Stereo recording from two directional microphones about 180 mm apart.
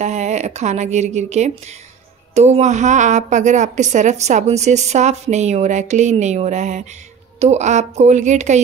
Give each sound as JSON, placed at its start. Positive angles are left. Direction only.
{"t": 0.0, "sound": "a woman's voice", "side_deg": -40}